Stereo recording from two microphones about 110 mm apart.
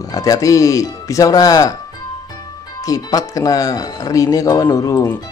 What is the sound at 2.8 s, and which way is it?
Speech, 30° left (ahead or behind).